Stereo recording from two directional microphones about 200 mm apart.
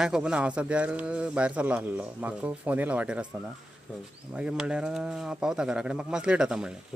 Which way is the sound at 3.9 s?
5° left (ahead or behind).